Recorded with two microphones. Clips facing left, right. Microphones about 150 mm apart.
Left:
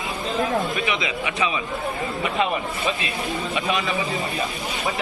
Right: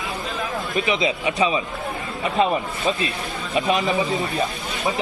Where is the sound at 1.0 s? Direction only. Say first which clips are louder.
Right 4 dB; 35° right (ahead or behind).